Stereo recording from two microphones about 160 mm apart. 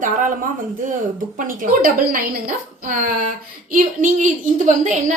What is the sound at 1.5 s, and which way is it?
A woman's voice, 60° right (ahead or behind).